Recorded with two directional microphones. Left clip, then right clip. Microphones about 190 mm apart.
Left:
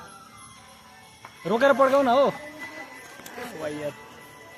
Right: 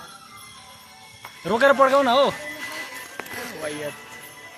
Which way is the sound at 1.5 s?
15° right (ahead or behind).